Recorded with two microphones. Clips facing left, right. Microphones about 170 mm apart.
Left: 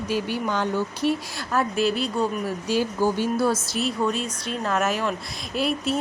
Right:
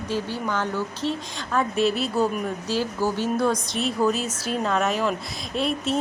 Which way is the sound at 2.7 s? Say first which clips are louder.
Left 3 dB; 15° left (ahead or behind).